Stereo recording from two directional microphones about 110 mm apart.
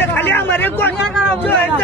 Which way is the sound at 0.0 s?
20° left (ahead or behind).